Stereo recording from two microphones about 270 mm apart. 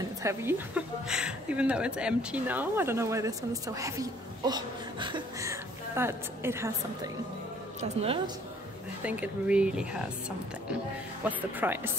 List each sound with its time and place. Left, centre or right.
0.2 s a woman's voice: centre
7.8 s speech: right
9.0 s speech: centre
11.2 s a woman's voice: centre